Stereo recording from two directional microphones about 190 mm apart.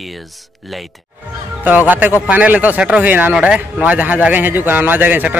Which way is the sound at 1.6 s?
10° right (ahead or behind).